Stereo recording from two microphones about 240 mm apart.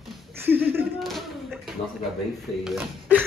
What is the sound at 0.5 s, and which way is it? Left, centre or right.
Speech, centre.